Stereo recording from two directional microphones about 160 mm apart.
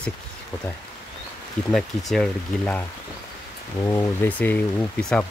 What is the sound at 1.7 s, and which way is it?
Speech, centre (ahead or behind).